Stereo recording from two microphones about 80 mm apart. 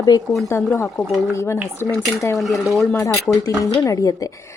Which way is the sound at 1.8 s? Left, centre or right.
Left.